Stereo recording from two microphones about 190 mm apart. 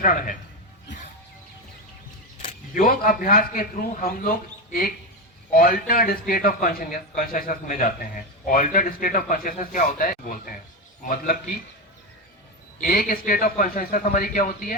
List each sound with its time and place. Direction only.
0.0 s a man's voice: 45° left (ahead or behind)
2.7 s a man's voice: 45° left (ahead or behind)
12.8 s a man's voice: 50° left (ahead or behind)